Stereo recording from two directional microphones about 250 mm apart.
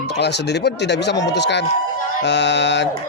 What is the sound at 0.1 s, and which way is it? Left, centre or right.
Speech, left.